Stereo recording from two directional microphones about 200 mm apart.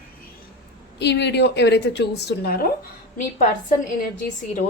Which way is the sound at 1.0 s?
60° left (ahead or behind).